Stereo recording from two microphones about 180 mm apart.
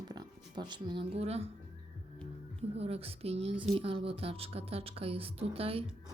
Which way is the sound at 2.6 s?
35° right (ahead or behind).